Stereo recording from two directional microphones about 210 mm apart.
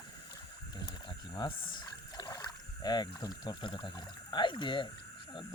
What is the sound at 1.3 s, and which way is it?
Speech, 20° left (ahead or behind).